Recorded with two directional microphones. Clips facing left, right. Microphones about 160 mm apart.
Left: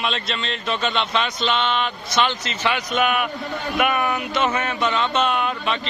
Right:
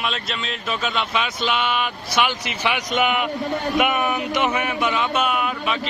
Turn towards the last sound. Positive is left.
turn(degrees=-5)  # may be behind; listen again after turning